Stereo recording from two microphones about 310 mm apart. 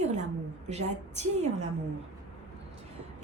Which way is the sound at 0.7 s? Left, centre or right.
Right.